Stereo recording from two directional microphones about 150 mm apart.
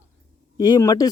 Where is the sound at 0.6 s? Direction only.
25° left (ahead or behind).